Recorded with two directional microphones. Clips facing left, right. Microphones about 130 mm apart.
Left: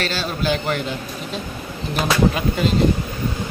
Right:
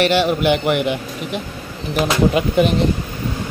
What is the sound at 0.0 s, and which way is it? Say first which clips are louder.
Speech: right 9 dB; 15° right (ahead or behind).